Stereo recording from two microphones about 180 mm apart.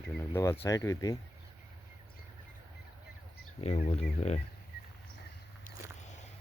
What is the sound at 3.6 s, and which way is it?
Speech, 40° left (ahead or behind).